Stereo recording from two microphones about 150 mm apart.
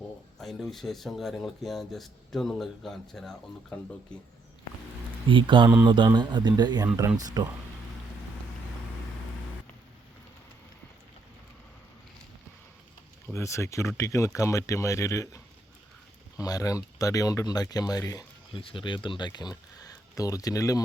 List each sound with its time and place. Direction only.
0.3 s speech: centre (ahead or behind)
5.3 s a man's voice: 30° right (ahead or behind)
13.2 s speech: 20° left (ahead or behind)
16.4 s speech: 25° left (ahead or behind)